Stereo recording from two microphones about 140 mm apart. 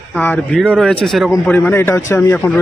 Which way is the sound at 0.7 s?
Centre (ahead or behind).